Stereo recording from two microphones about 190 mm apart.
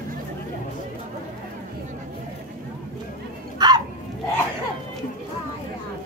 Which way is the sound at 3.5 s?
20° right (ahead or behind).